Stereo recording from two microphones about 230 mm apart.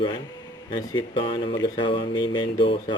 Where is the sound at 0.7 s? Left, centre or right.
Centre.